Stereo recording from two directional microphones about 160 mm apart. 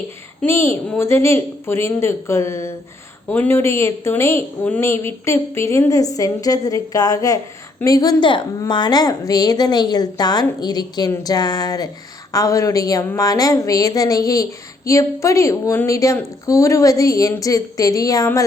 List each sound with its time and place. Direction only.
0.4 s a woman's voice: 15° left (ahead or behind)